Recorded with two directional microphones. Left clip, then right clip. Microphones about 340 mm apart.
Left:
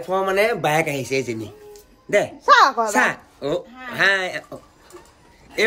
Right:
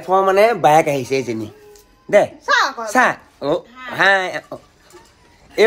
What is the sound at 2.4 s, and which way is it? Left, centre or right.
Speech, left.